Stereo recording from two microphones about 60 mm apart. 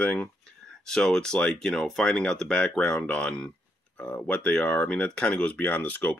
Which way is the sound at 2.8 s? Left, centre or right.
Left.